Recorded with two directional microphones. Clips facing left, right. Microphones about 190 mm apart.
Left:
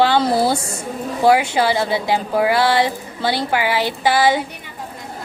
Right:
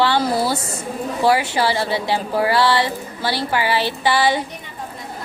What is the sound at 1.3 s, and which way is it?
A woman's voice, 15° left (ahead or behind).